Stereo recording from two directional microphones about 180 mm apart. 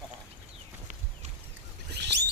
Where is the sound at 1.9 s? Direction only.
65° right (ahead or behind).